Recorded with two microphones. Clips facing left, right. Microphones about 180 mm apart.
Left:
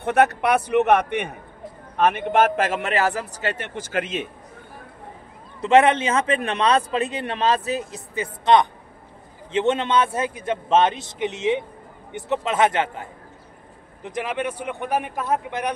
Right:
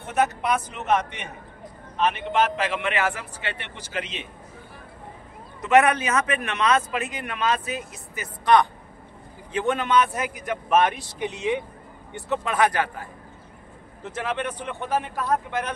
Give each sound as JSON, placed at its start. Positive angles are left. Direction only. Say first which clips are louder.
{"t": 0.0, "sound": "a man's voice", "louder": "left 5 dB", "side_deg": 65}
{"t": 5.6, "sound": "a man's voice", "louder": "left 3 dB", "side_deg": 30}